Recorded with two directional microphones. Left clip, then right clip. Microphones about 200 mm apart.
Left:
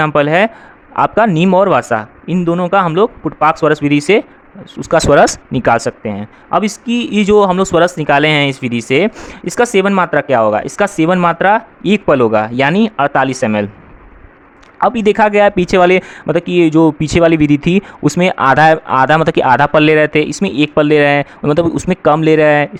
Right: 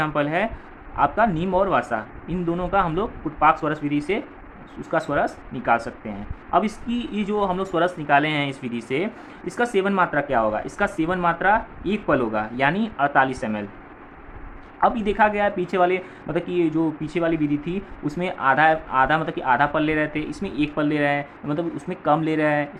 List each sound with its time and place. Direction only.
0.0 s speech: 55° left (ahead or behind)
14.8 s speech: 50° left (ahead or behind)